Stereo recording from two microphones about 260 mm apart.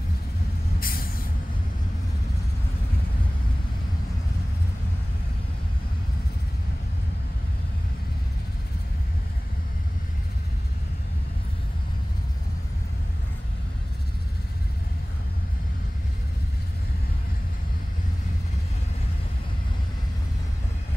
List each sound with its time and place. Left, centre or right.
0.7 s vehicle: left